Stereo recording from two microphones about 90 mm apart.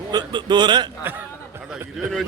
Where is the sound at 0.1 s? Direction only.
55° right (ahead or behind).